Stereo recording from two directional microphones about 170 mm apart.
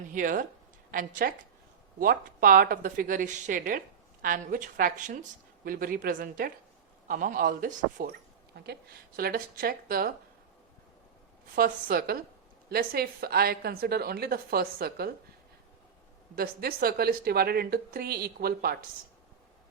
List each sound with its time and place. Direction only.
0.1 s a woman's voice: 50° right (ahead or behind)
8.5 s a woman's voice: 70° right (ahead or behind)
11.5 s a woman's voice: 60° right (ahead or behind)
16.3 s a woman's voice: 60° right (ahead or behind)